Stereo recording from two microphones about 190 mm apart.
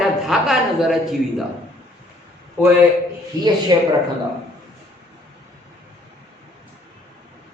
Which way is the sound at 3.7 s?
25° right (ahead or behind).